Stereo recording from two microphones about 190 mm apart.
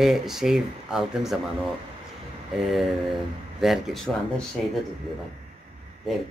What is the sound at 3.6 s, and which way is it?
Speech, centre (ahead or behind).